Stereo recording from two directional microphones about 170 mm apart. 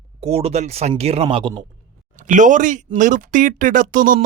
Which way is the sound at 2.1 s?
50° right (ahead or behind).